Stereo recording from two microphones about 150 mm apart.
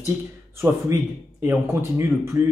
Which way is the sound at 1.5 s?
15° right (ahead or behind).